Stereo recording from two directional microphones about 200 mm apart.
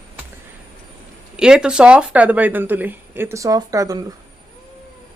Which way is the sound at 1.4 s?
5° right (ahead or behind).